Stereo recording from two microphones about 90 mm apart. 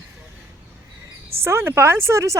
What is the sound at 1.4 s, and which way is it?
Speech, 30° right (ahead or behind).